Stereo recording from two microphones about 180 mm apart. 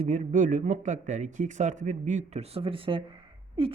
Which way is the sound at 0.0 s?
40° right (ahead or behind).